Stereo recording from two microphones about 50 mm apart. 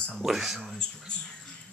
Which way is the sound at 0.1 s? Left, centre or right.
Centre.